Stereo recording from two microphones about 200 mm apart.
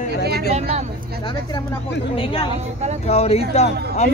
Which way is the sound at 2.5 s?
35° right (ahead or behind).